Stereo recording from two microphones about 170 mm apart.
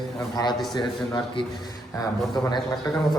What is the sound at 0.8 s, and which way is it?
Speech, 25° left (ahead or behind).